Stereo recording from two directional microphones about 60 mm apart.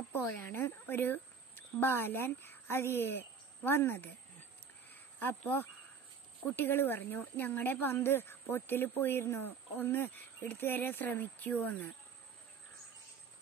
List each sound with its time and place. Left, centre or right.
0.3 s speech: left
5.2 s speech: left
9.8 s speech: left